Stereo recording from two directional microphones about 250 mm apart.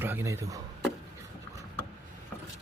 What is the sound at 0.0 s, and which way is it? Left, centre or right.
Speech, centre.